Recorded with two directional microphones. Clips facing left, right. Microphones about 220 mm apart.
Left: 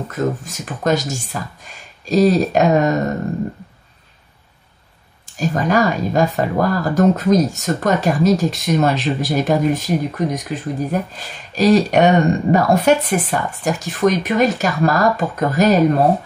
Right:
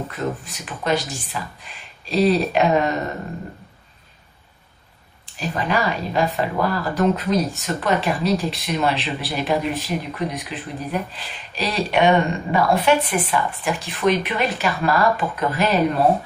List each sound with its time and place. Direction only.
0.1 s speech: 45° left (ahead or behind)
5.2 s speech: 45° left (ahead or behind)